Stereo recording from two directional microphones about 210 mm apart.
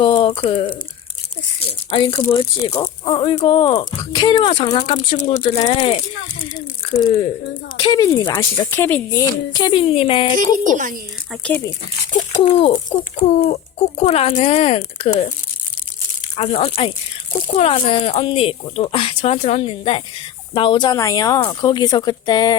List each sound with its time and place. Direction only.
0.0 s speech: 25° left (ahead or behind)
2.6 s speech: 15° left (ahead or behind)
10.3 s speech: 40° right (ahead or behind)
11.3 s speech: 10° left (ahead or behind)
12.4 s speech: 30° left (ahead or behind)
16.4 s speech: 25° left (ahead or behind)